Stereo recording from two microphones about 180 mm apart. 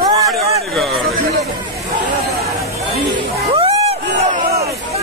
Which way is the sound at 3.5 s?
30° right (ahead or behind).